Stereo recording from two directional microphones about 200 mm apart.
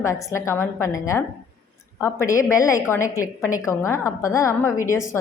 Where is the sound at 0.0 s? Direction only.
15° left (ahead or behind).